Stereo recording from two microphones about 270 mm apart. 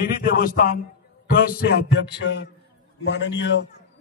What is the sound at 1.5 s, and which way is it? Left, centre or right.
Music, left.